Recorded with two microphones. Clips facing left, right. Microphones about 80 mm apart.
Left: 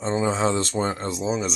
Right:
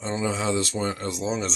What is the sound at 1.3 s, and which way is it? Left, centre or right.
Speech, centre.